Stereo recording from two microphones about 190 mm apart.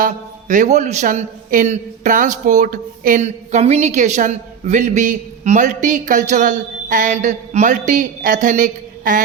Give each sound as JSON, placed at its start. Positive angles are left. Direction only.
{"t": 0.0, "sound": "a man's voice", "side_deg": -40}